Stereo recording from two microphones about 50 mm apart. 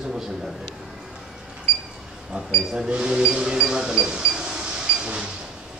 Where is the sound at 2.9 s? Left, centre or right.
Right.